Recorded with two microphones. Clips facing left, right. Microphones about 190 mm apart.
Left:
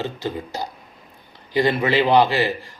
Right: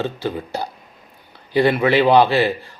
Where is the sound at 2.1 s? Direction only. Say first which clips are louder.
Right 1 dB; 15° left (ahead or behind).